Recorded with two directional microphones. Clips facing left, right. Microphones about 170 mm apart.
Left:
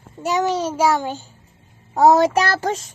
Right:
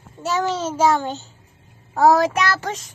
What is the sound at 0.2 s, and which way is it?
A child's voice, 15° left (ahead or behind).